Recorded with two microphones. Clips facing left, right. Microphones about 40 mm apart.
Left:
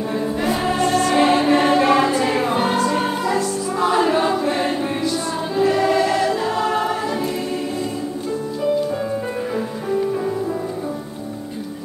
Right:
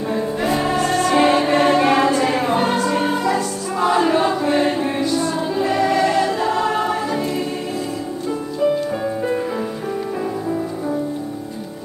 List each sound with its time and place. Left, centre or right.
0.1 s music: centre